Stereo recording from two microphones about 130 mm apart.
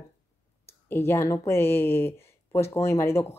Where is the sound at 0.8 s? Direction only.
15° left (ahead or behind).